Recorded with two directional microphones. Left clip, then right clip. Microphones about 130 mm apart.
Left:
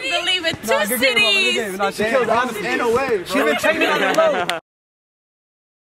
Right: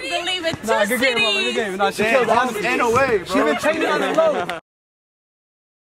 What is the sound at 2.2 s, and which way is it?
Speech, 5° right (ahead or behind).